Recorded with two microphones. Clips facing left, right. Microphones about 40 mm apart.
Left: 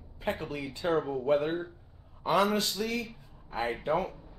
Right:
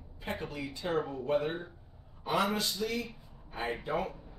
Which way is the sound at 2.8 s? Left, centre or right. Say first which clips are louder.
Left 1 dB; left.